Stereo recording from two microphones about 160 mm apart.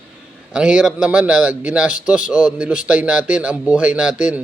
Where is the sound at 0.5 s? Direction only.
5° right (ahead or behind).